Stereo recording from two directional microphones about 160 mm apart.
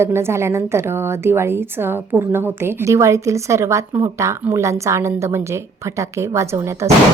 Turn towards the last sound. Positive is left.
turn(degrees=-15)  # may be behind; listen again after turning